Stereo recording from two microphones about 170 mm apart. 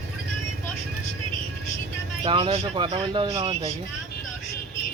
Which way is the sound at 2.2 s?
30° right (ahead or behind).